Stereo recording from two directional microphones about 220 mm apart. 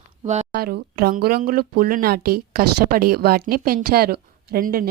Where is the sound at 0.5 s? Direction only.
45° right (ahead or behind).